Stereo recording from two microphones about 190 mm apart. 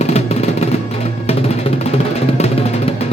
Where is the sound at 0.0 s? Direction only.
35° left (ahead or behind).